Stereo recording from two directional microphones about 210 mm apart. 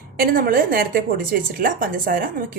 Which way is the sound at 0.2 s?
45° right (ahead or behind).